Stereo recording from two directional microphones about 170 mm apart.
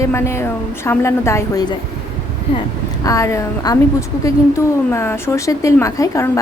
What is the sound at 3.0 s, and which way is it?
A woman's voice, 20° left (ahead or behind).